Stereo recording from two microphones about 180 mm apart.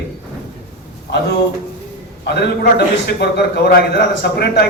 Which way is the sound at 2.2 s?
65° left (ahead or behind).